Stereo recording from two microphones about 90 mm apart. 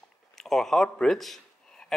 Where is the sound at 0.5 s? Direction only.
5° left (ahead or behind).